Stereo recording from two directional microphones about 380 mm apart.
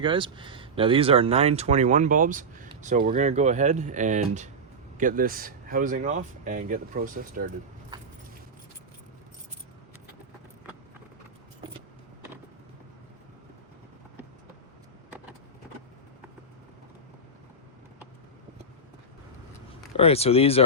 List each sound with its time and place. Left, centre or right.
0.0 s speech: centre
20.0 s speech: centre